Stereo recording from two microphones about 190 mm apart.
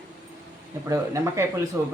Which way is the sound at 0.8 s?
15° right (ahead or behind).